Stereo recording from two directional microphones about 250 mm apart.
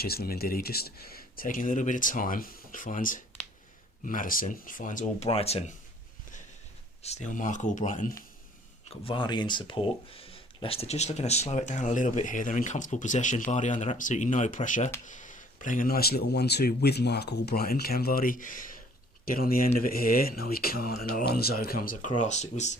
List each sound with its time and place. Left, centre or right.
0.0 s speech: left
7.0 s speech: left
8.9 s speech: left